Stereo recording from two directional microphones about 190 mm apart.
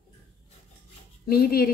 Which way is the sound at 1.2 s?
50° left (ahead or behind).